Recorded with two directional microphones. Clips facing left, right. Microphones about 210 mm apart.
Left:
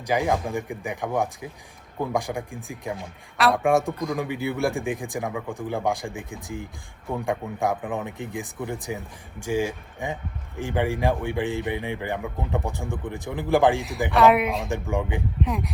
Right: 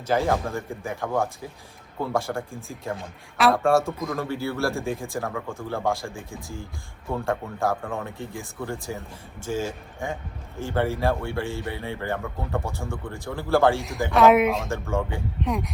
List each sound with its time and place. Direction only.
0.0 s speech: 15° left (ahead or behind)
2.9 s a man's voice: centre (ahead or behind)
3.6 s speech: 15° left (ahead or behind)
3.9 s a man's voice: centre (ahead or behind)
4.2 s speech: 15° left (ahead or behind)
14.1 s a man's voice: centre (ahead or behind)
14.7 s speech: 15° left (ahead or behind)
15.4 s a man's voice: centre (ahead or behind)